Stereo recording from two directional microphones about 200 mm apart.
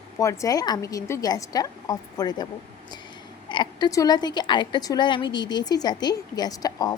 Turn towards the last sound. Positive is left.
turn(degrees=20)  # may be behind; listen again after turning